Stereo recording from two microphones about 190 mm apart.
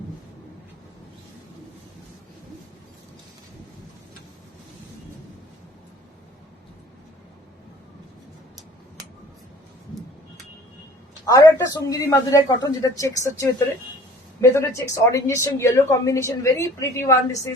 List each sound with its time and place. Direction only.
11.3 s speech: 15° left (ahead or behind)